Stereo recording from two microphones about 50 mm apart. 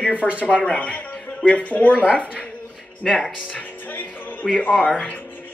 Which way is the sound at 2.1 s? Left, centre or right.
Right.